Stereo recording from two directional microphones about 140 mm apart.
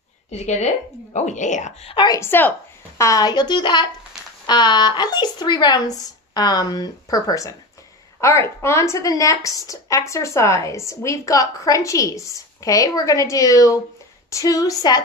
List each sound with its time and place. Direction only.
0.3 s speech: 55° left (ahead or behind)
2.0 s a woman's voice: 20° left (ahead or behind)